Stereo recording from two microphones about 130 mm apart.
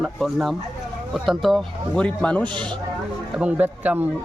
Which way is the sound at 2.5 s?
35° right (ahead or behind).